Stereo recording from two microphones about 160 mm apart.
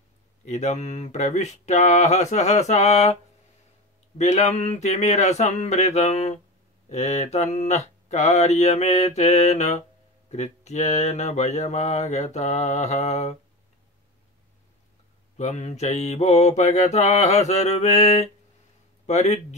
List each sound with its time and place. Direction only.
0.5 s mantra: 45° left (ahead or behind)
4.2 s mantra: 45° left (ahead or behind)
15.3 s mantra: 45° left (ahead or behind)